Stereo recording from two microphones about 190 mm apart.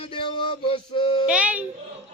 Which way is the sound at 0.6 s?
30° left (ahead or behind).